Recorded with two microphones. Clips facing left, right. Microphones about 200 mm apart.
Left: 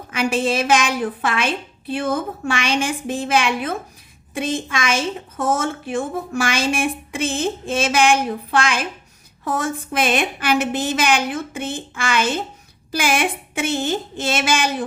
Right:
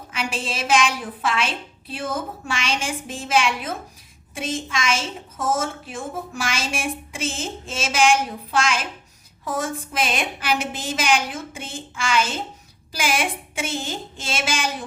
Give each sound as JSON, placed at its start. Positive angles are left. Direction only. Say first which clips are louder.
{"t": 0.1, "sound": "a woman's voice", "louder": "left 9 dB", "side_deg": 55}